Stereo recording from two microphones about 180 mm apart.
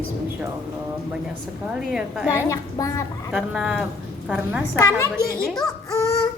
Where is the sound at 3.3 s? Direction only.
5° right (ahead or behind).